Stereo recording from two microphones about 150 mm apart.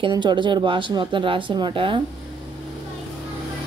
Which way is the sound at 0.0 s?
30° right (ahead or behind).